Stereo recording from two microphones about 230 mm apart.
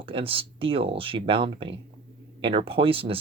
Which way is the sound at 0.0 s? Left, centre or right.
Right.